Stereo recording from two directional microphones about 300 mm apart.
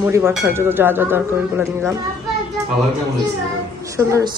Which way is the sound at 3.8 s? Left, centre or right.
Centre.